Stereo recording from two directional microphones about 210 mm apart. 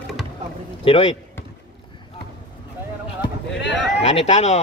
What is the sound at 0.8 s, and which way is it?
Speech, 25° left (ahead or behind).